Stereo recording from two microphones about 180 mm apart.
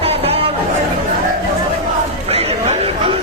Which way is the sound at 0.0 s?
30° right (ahead or behind).